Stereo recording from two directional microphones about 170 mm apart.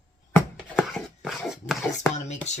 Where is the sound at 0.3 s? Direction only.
5° left (ahead or behind).